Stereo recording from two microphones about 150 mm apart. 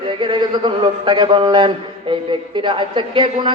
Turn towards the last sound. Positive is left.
turn(degrees=-30)  # may be behind; listen again after turning